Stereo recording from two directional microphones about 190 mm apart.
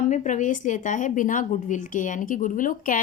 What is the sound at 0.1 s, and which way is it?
A woman's voice, 40° left (ahead or behind).